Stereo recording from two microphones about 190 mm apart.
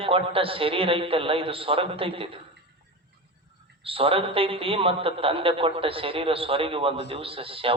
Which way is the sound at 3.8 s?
30° right (ahead or behind).